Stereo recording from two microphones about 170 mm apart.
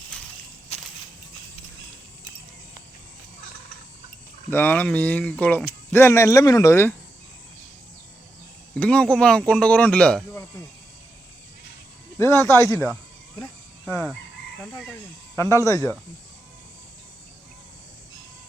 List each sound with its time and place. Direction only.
0.1 s walk: 5° left (ahead or behind)
4.5 s speech: 10° left (ahead or behind)
8.7 s speech: 5° left (ahead or behind)
12.1 s speech: 15° left (ahead or behind)
13.9 s speech: 10° left (ahead or behind)
15.4 s speech: 15° left (ahead or behind)